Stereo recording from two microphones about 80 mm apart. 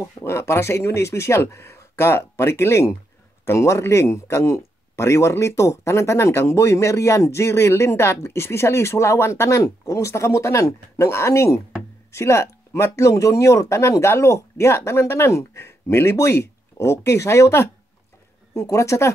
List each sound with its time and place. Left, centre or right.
0.0 s speech: left